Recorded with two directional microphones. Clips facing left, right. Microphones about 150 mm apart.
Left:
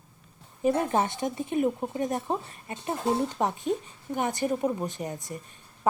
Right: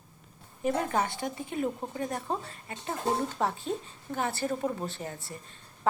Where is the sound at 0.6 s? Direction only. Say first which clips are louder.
Left 4 dB; 20° left (ahead or behind).